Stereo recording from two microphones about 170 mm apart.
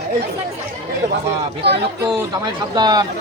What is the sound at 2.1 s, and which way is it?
Speech, 25° right (ahead or behind).